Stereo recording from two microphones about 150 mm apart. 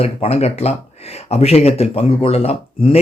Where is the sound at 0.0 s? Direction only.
40° left (ahead or behind).